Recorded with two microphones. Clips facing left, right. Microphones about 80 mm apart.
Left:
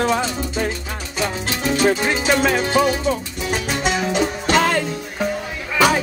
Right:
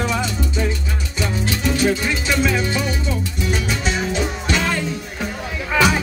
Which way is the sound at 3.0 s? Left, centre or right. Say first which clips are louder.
Left 2 dB; left.